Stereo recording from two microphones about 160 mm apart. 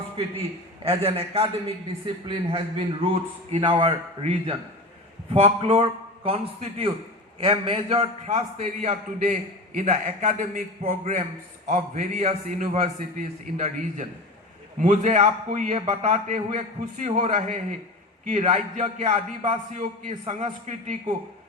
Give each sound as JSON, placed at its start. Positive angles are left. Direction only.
{"t": 0.9, "sound": "a man's voice", "side_deg": -35}
{"t": 8.3, "sound": "a man's voice", "side_deg": -50}
{"t": 11.7, "sound": "a man's voice", "side_deg": -45}
{"t": 17.3, "sound": "a man's voice", "side_deg": -50}